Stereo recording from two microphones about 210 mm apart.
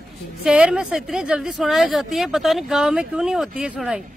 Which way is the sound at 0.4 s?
5° right (ahead or behind).